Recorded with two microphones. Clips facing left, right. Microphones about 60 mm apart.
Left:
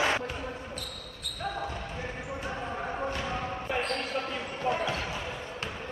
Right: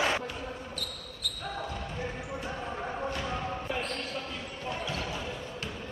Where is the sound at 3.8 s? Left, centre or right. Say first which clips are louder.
Left 4 dB; left.